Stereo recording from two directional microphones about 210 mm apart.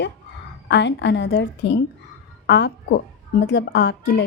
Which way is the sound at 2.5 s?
55° left (ahead or behind).